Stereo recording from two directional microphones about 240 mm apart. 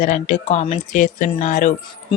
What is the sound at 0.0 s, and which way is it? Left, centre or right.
Speech, left.